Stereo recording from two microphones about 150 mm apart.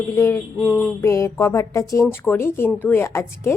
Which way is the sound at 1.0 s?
20° left (ahead or behind).